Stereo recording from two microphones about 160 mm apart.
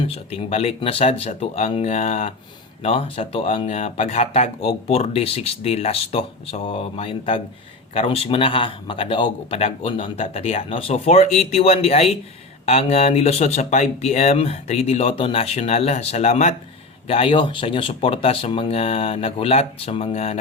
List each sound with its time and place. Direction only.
0.0 s speech: 40° left (ahead or behind)
17.1 s speech: 35° left (ahead or behind)